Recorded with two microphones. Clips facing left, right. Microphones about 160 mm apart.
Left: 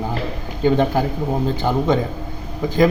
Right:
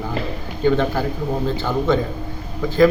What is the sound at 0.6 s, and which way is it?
A man's voice, 15° left (ahead or behind).